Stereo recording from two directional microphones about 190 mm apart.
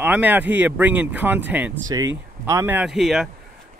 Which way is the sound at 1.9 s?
20° right (ahead or behind).